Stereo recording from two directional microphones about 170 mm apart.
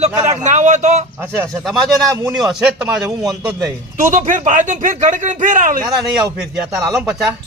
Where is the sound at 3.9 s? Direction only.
50° right (ahead or behind).